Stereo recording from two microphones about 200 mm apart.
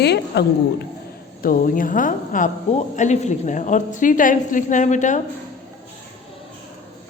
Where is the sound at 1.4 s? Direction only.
45° left (ahead or behind).